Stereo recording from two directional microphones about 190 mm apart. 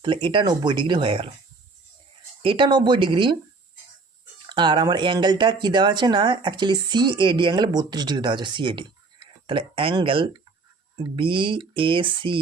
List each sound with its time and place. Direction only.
0.0 s speech: 25° right (ahead or behind)
2.4 s speech: 25° right (ahead or behind)
4.4 s speech: 25° right (ahead or behind)